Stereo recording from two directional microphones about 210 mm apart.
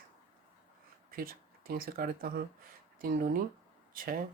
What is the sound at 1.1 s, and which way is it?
Speech, 45° right (ahead or behind).